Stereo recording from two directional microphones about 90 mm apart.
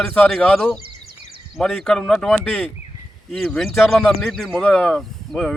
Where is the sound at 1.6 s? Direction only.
5° left (ahead or behind).